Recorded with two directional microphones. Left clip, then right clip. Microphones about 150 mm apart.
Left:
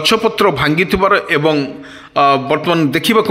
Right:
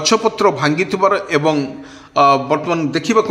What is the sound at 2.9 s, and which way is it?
Speech, 35° left (ahead or behind).